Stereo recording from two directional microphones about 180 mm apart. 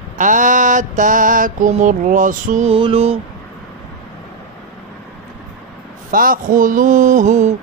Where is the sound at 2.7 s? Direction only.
30° right (ahead or behind).